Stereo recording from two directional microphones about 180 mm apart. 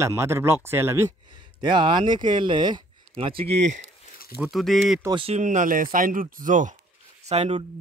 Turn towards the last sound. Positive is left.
turn(degrees=-35)  # may be behind; listen again after turning